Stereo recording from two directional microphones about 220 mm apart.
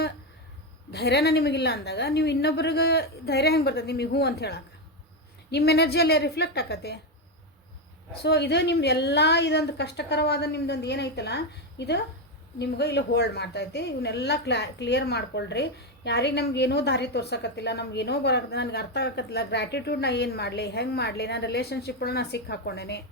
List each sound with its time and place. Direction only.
0.9 s a woman's voice: 50° left (ahead or behind)
8.2 s a woman's voice: 50° left (ahead or behind)